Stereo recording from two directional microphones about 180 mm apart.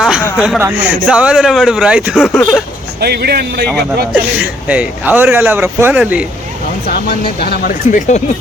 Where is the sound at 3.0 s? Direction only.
60° right (ahead or behind).